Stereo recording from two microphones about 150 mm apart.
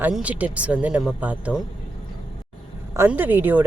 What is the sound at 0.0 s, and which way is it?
Speech, 10° right (ahead or behind).